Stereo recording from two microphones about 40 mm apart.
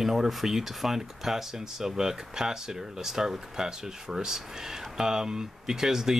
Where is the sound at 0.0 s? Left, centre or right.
Centre.